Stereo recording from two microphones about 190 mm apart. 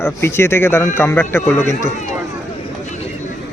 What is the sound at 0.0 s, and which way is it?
A man's voice, 15° left (ahead or behind).